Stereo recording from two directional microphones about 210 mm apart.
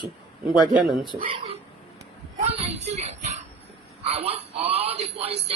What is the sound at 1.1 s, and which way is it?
A woman's voice, 25° right (ahead or behind).